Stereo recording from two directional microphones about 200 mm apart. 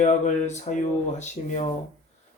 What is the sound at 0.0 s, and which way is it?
Speech, 35° left (ahead or behind).